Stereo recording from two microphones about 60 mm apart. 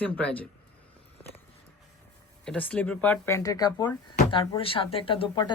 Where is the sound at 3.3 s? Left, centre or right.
Left.